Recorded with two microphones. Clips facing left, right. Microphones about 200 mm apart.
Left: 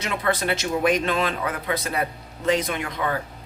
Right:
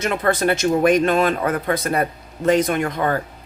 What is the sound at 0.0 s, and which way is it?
Speech, 50° right (ahead or behind).